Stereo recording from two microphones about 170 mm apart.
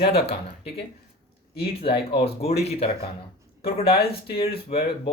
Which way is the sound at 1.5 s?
30° left (ahead or behind).